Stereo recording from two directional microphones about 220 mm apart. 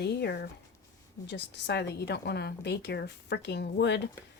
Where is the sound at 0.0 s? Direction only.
50° left (ahead or behind).